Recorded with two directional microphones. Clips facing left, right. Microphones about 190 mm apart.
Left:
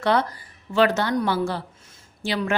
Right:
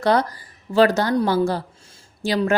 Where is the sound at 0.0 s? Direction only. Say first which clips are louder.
Right 3 dB; 40° right (ahead or behind).